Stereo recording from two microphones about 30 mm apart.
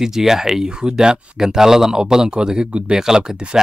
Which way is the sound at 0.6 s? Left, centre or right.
Right.